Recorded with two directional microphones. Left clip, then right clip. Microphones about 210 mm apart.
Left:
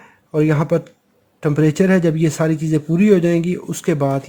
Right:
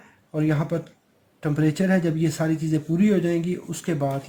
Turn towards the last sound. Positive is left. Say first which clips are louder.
# left 7 dB
turn(degrees=55)  # may be behind; listen again after turning